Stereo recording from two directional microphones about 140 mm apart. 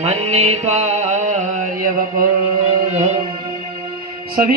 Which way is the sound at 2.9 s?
55° right (ahead or behind).